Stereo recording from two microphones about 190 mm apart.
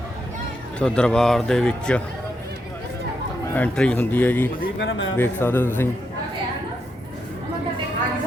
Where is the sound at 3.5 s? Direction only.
5° left (ahead or behind).